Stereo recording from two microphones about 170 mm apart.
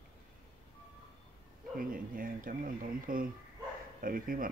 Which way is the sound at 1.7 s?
55° right (ahead or behind).